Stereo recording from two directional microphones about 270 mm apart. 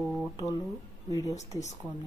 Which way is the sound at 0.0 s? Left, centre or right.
Centre.